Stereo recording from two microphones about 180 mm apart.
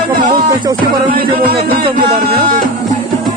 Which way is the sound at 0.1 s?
50° right (ahead or behind).